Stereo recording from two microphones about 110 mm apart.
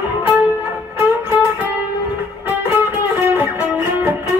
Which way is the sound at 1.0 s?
20° right (ahead or behind).